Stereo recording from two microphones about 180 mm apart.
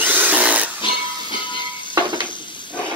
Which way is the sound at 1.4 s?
25° left (ahead or behind).